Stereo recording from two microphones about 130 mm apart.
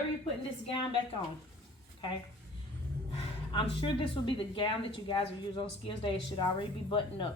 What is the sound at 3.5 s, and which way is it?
Speech, 40° left (ahead or behind).